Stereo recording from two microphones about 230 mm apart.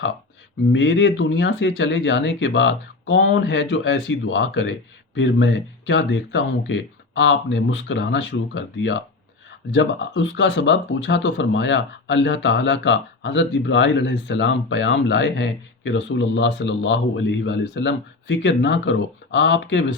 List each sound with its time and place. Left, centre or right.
0.7 s speech: left